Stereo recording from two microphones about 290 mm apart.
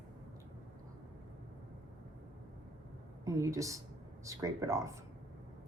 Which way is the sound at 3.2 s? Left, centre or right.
Centre.